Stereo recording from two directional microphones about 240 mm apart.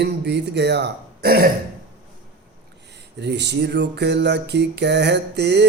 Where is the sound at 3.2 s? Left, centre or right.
Right.